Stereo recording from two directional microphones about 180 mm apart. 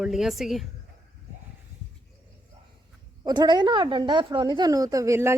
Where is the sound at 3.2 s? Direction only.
25° right (ahead or behind).